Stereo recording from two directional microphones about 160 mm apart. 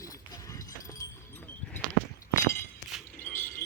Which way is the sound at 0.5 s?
20° left (ahead or behind).